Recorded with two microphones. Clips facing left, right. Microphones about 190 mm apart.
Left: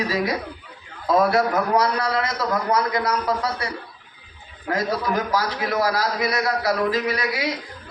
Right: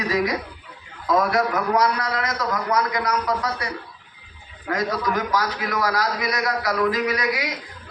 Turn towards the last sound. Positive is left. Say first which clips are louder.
# right 1 dB
turn(degrees=30)  # may be behind; listen again after turning